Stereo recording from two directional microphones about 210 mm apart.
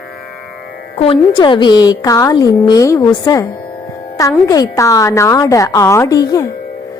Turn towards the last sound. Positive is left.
turn(degrees=15)  # may be behind; listen again after turning